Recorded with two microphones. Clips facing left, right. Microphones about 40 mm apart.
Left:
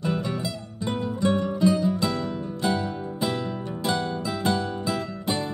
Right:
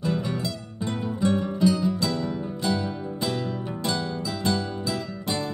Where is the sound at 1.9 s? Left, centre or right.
Centre.